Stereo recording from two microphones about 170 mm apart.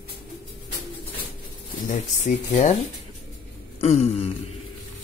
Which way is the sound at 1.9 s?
50° left (ahead or behind).